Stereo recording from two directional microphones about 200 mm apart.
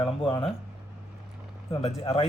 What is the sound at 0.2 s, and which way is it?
Speech, 25° left (ahead or behind).